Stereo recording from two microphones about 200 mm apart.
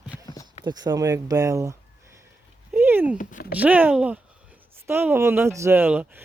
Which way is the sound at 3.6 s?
10° right (ahead or behind).